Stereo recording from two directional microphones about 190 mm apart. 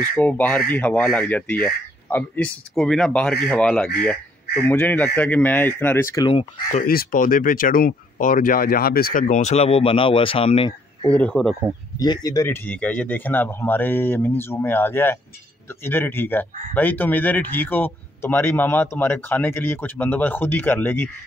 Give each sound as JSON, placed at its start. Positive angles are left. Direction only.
{"t": 0.1, "sound": "speech", "side_deg": 10}
{"t": 6.8, "sound": "speech", "side_deg": 50}
{"t": 11.1, "sound": "speech", "side_deg": 5}
{"t": 12.0, "sound": "speech", "side_deg": 20}